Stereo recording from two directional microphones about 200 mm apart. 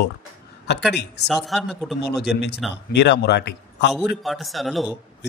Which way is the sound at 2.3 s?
55° left (ahead or behind).